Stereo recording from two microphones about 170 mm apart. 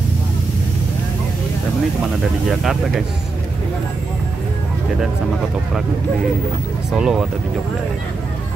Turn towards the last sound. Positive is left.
turn(degrees=-5)  # may be behind; listen again after turning